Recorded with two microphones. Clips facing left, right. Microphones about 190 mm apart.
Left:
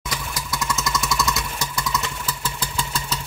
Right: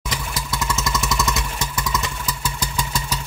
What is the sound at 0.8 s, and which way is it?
Vehicle, 20° right (ahead or behind).